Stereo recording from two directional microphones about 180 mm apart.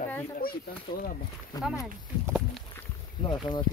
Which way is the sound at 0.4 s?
55° left (ahead or behind).